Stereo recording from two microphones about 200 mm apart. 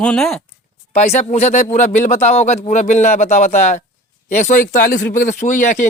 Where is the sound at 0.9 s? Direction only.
35° left (ahead or behind).